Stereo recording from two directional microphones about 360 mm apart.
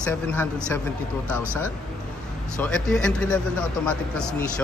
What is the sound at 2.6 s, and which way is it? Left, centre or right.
Speech, centre.